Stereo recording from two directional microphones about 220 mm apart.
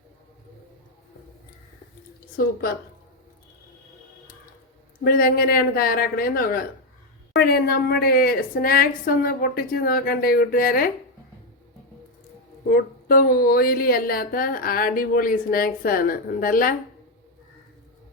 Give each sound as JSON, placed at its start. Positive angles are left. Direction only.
{"t": 2.3, "sound": "speech", "side_deg": 40}
{"t": 5.0, "sound": "a woman's voice", "side_deg": 40}
{"t": 12.7, "sound": "speech", "side_deg": 40}